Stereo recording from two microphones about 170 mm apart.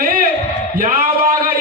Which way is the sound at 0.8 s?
55° right (ahead or behind).